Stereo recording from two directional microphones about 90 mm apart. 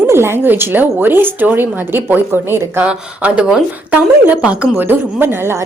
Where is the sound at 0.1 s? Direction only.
30° right (ahead or behind).